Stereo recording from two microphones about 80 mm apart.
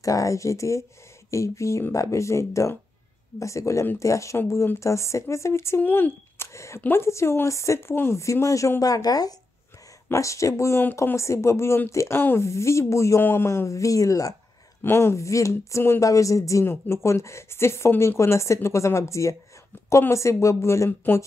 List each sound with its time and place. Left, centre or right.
0.0 s speech: left
5.8 s speech: left
6.3 s a sound: left
6.8 s speech: left
10.1 s speech: left
14.8 s speech: left